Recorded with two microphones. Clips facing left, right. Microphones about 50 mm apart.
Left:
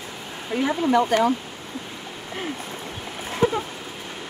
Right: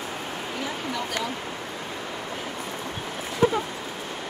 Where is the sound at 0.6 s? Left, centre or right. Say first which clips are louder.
Left 13 dB; left.